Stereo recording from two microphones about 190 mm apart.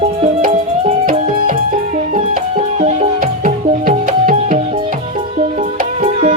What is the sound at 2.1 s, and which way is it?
Music, 35° right (ahead or behind).